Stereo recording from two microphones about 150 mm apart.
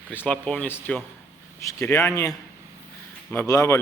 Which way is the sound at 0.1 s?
10° left (ahead or behind).